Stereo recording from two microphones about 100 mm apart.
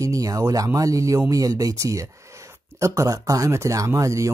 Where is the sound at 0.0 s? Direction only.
35° right (ahead or behind).